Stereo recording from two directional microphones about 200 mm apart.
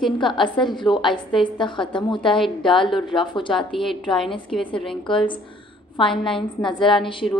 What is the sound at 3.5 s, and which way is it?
A woman's voice, centre (ahead or behind).